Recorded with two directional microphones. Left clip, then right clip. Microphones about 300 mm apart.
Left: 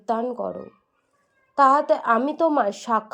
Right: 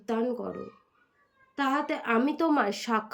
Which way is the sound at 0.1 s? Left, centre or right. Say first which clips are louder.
Left 5 dB; centre.